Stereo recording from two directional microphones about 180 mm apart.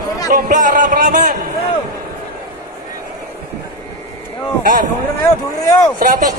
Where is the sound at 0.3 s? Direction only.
45° right (ahead or behind).